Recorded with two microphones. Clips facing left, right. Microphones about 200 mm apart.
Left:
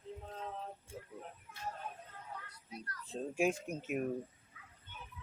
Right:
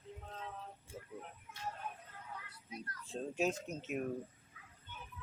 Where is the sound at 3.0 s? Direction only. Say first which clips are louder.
Left 2 dB; 5° left (ahead or behind).